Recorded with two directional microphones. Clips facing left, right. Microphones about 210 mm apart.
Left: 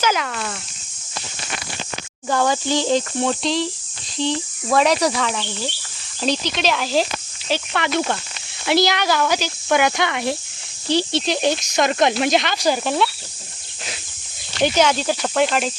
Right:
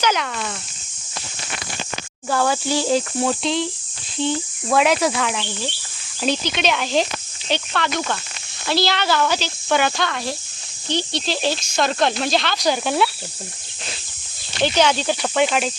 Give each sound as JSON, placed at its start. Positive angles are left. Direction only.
{"t": 0.0, "sound": "speech", "side_deg": 5}
{"t": 2.3, "sound": "speech", "side_deg": -5}
{"t": 8.6, "sound": "speech", "side_deg": 15}
{"t": 10.0, "sound": "speech", "side_deg": 20}
{"t": 10.8, "sound": "speech", "side_deg": 35}
{"t": 11.3, "sound": "speech", "side_deg": 15}
{"t": 14.6, "sound": "speech", "side_deg": 5}